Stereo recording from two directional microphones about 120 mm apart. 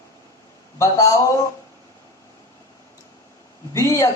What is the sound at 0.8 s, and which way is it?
Speech, 30° left (ahead or behind).